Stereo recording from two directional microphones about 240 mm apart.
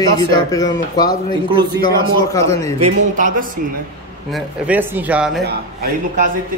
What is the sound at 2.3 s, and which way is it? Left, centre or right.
Speech, centre.